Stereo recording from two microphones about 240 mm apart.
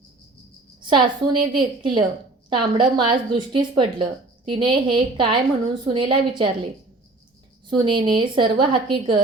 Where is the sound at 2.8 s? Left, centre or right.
Centre.